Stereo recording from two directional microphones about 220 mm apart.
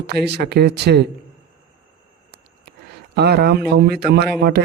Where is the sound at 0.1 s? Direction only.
50° right (ahead or behind).